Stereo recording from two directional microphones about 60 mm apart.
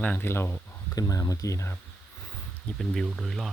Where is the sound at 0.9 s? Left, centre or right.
Left.